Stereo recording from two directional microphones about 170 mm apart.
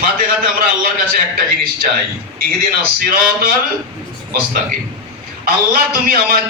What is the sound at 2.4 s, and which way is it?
Speech, 60° right (ahead or behind).